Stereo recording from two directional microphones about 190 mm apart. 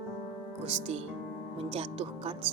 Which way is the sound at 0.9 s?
35° right (ahead or behind).